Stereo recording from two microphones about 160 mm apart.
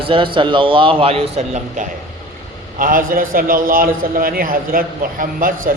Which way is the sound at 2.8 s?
60° right (ahead or behind).